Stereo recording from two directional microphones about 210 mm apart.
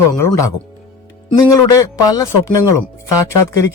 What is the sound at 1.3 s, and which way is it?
Speech, 15° left (ahead or behind).